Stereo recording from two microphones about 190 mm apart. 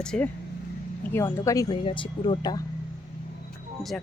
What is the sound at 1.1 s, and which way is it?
Speech, 15° left (ahead or behind).